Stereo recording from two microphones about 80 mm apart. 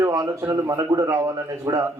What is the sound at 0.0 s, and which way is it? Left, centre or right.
A man's voice, right.